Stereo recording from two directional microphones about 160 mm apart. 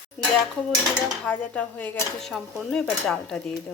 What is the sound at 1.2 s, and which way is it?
Speech, 10° left (ahead or behind).